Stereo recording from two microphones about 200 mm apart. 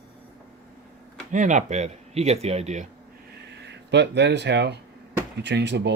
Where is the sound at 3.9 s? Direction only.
60° right (ahead or behind).